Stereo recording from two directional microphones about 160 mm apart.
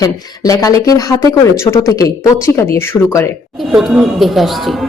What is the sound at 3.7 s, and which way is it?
Speech, centre (ahead or behind).